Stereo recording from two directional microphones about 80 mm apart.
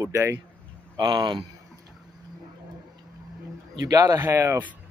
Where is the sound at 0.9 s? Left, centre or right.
Right.